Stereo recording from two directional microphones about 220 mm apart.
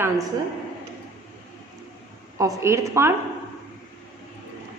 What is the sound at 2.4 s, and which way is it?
Speech, 15° right (ahead or behind).